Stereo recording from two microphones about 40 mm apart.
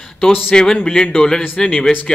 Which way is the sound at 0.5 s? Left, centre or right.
Left.